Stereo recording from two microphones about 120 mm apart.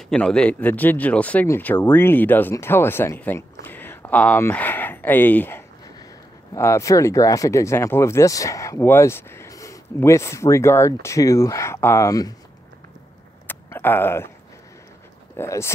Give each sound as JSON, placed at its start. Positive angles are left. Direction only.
{"t": 0.1, "sound": "speech", "side_deg": 5}
{"t": 13.5, "sound": "a sound", "side_deg": 20}
{"t": 15.3, "sound": "speech", "side_deg": 20}